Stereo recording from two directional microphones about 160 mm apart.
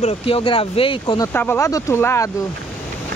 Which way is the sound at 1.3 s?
15° left (ahead or behind).